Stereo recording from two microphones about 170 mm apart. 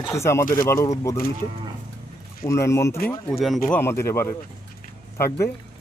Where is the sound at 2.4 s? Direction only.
15° left (ahead or behind).